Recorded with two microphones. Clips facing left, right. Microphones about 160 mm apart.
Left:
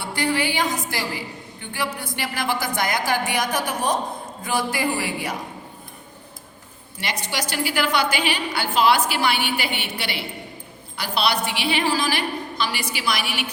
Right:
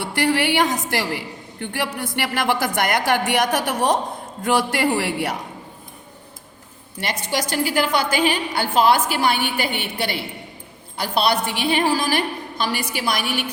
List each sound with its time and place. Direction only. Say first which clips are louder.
0.0 s a woman's voice: right 3 dB; 65° right (ahead or behind)
7.0 s a woman's voice: right 3 dB; 50° right (ahead or behind)